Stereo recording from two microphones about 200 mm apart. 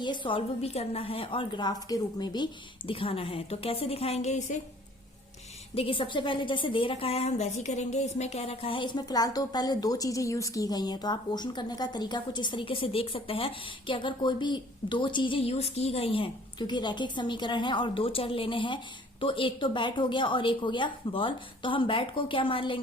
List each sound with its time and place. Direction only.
0.0 s a woman's voice: 25° left (ahead or behind)
5.7 s a woman's voice: 25° left (ahead or behind)